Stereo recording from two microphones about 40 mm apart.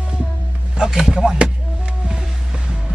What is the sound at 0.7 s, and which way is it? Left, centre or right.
Speech, centre.